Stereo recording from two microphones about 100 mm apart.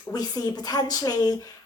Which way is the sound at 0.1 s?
40° left (ahead or behind).